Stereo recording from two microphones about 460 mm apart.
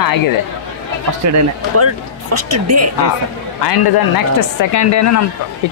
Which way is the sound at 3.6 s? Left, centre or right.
Left.